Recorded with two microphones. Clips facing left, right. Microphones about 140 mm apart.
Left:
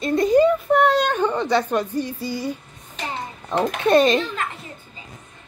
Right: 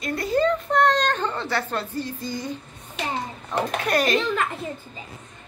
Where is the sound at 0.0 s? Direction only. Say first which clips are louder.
Left 6 dB; 20° left (ahead or behind).